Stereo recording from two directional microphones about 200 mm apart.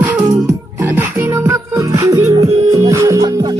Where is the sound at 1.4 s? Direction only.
15° right (ahead or behind).